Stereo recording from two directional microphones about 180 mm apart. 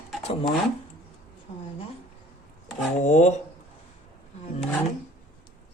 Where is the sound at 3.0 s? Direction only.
40° left (ahead or behind).